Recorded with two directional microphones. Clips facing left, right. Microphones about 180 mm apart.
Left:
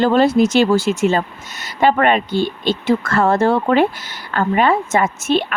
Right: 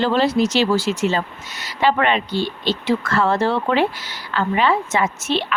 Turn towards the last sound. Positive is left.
turn(degrees=50)  # may be behind; listen again after turning